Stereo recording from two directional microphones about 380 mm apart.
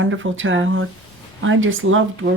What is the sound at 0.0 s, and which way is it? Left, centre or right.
Speech, right.